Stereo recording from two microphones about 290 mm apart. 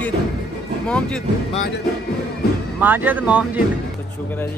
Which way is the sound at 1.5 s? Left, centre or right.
Left.